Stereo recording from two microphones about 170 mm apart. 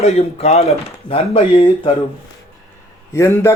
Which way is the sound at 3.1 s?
15° left (ahead or behind).